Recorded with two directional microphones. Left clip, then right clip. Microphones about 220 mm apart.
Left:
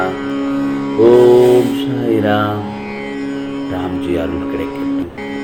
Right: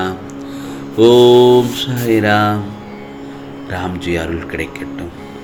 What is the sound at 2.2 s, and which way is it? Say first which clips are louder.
Music: right 4 dB; 40° right (ahead or behind).